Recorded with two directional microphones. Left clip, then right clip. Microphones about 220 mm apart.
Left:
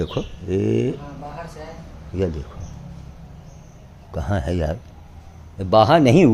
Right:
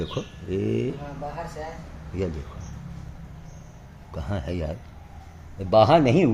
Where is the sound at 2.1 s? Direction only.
20° left (ahead or behind).